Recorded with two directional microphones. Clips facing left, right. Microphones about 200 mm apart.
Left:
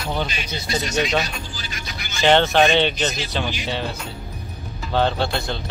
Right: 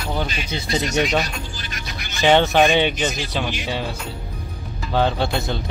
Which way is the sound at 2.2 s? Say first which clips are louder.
Right 1 dB; 5° right (ahead or behind).